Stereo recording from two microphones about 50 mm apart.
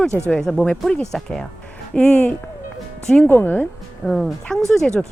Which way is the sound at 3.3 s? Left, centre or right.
Left.